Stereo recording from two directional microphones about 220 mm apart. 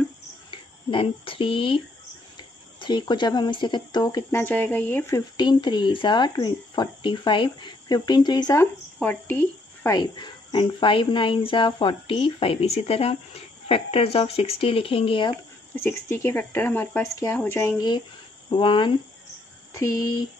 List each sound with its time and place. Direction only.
0.5 s speech: 20° left (ahead or behind)
2.8 s speech: 20° left (ahead or behind)
9.8 s speech: 20° left (ahead or behind)
15.7 s speech: 10° left (ahead or behind)